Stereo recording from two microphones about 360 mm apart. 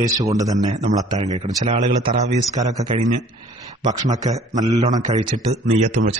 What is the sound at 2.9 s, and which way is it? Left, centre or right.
A man's voice, centre.